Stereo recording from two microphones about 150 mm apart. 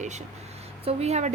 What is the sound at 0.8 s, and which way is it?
Speech, 40° right (ahead or behind).